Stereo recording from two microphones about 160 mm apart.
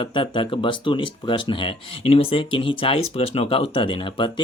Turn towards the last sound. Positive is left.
turn(degrees=30)  # may be behind; listen again after turning